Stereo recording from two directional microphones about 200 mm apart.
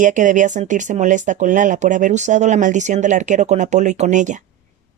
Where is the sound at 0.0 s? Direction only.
40° right (ahead or behind).